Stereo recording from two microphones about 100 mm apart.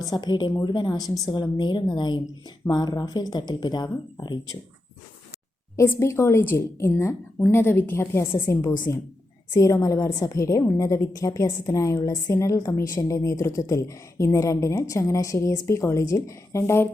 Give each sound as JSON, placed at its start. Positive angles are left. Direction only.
{"t": 0.0, "sound": "speech", "side_deg": 45}
{"t": 5.7, "sound": "a woman's voice", "side_deg": 25}